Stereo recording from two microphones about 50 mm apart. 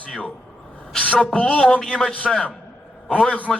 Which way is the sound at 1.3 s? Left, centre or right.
Left.